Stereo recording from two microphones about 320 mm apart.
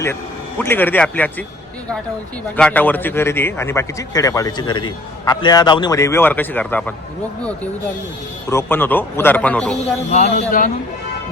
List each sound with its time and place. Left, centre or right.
0.6 s a man's voice: centre
2.6 s a man's voice: centre
8.4 s a man's voice: centre
10.1 s speech: left